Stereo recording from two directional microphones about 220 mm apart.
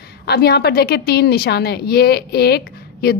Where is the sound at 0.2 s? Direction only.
45° left (ahead or behind).